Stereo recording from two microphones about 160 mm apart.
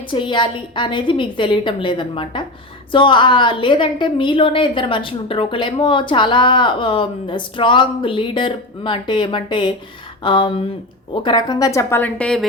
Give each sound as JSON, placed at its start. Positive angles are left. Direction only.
{"t": 0.1, "sound": "a woman's voice", "side_deg": 30}